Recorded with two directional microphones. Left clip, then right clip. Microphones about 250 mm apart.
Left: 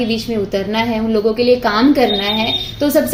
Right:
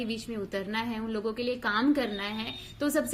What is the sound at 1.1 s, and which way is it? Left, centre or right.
Speech, right.